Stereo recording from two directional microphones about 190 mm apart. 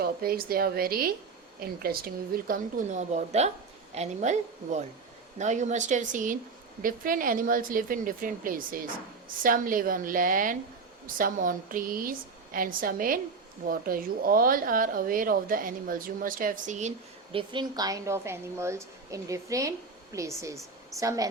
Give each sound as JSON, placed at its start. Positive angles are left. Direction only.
{"t": 0.0, "sound": "a woman's voice", "side_deg": -50}
{"t": 17.3, "sound": "a woman's voice", "side_deg": -25}